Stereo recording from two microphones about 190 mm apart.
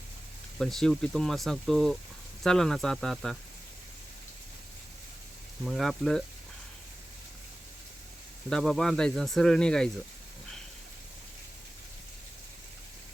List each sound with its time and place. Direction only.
0.6 s speech: centre (ahead or behind)
5.6 s speech: centre (ahead or behind)
8.4 s speech: centre (ahead or behind)